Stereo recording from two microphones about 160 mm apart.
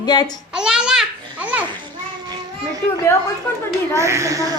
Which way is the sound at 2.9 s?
15° left (ahead or behind).